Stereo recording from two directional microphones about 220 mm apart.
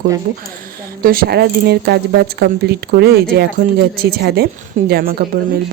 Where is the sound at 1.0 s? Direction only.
40° right (ahead or behind).